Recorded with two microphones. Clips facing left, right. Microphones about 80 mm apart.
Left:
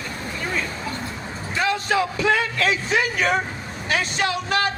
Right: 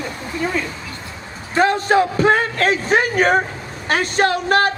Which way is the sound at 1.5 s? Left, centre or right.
Right.